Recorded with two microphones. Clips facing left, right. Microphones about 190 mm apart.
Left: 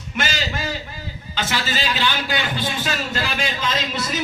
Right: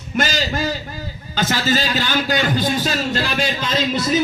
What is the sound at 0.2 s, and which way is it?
A man's voice, 40° right (ahead or behind).